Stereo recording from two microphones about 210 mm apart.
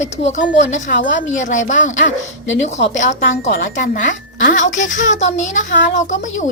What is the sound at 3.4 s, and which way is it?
Speech, 55° left (ahead or behind).